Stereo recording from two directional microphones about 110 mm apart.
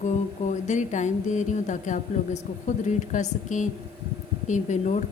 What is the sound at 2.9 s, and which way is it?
Speech, 90° left.